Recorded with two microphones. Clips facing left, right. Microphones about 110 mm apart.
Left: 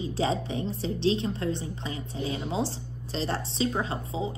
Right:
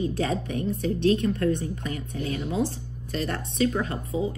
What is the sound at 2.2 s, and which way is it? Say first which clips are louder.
Speech: right 2 dB; 25° left (ahead or behind).